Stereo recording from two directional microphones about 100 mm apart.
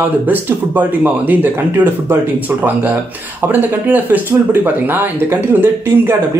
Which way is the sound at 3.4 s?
20° right (ahead or behind).